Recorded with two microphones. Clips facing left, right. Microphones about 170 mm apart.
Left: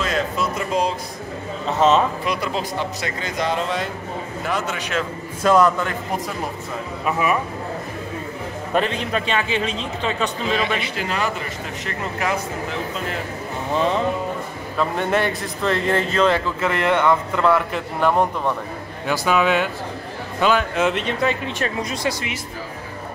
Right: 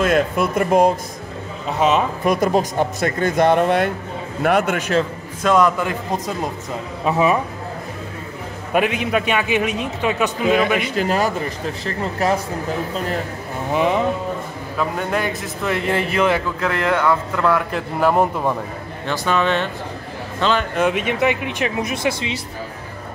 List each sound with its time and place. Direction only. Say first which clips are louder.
0.0 s speech: right 5 dB; 55° right (ahead or behind)
1.8 s a man's voice: left 1 dB; 15° right (ahead or behind)
2.2 s a man's voice: right 7 dB; 45° right (ahead or behind)
5.4 s a man's voice: even; 5° left (ahead or behind)
5.8 s a man's voice: right 2 dB; 20° right (ahead or behind)
8.7 s a man's voice: right 3 dB; 10° right (ahead or behind)
10.8 s speech: right 5 dB; 45° right (ahead or behind)
13.7 s a man's voice: right 2 dB; 15° right (ahead or behind)
14.8 s a man's voice: left 1 dB; centre (ahead or behind)
16.5 s a man's voice: even; centre (ahead or behind)
19.0 s a man's voice: left 1 dB; 10° left (ahead or behind)
20.7 s a man's voice: right 2 dB; 10° right (ahead or behind)